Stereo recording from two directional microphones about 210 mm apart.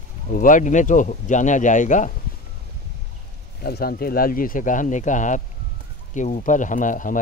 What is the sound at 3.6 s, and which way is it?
Speech, 45° left (ahead or behind).